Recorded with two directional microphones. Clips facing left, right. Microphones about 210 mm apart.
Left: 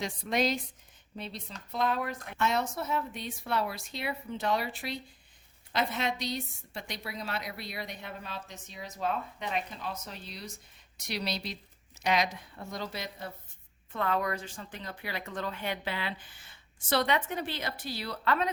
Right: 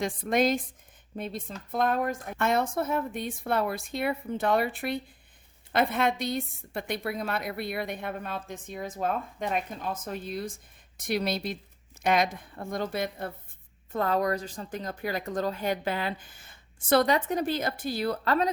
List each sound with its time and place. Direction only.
0.0 s a woman's voice: 50° right (ahead or behind)
13.9 s a woman's voice: 40° right (ahead or behind)